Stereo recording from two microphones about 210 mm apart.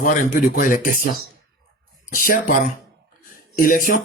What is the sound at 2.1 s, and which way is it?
Speech, 40° left (ahead or behind).